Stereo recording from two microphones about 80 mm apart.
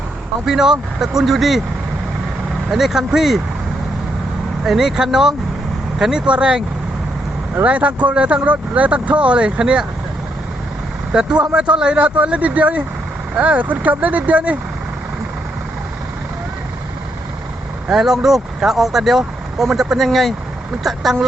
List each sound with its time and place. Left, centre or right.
0.4 s speech: centre
2.6 s speech: centre
4.6 s speech: centre
11.1 s speech: centre
17.9 s speech: centre